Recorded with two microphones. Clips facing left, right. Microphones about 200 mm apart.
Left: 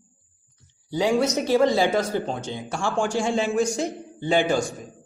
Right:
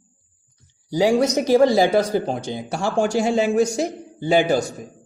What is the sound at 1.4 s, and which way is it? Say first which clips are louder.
A man's voice: right 5 dB; 40° right (ahead or behind).